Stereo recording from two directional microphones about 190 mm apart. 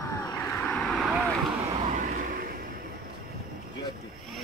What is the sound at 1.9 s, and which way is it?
Vehicle, 45° right (ahead or behind).